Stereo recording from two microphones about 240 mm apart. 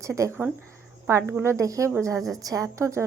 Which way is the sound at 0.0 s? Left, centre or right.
Centre.